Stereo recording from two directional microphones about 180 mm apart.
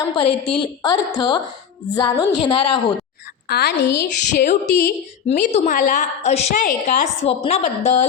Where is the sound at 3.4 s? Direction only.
65° left (ahead or behind).